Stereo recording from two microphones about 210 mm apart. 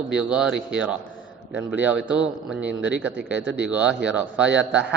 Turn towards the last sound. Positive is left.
turn(degrees=-5)  # may be behind; listen again after turning